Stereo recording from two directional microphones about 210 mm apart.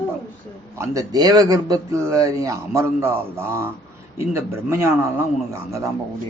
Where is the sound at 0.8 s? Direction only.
15° right (ahead or behind).